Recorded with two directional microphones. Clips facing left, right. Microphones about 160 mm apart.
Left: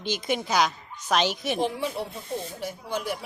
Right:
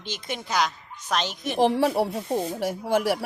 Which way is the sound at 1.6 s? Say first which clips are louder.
Right 11 dB; 75° right (ahead or behind).